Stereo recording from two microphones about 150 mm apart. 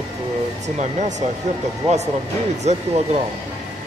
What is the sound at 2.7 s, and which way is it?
Speech, 50° right (ahead or behind).